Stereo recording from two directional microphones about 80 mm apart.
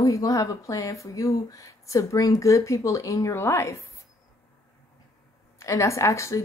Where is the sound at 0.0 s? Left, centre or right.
Left.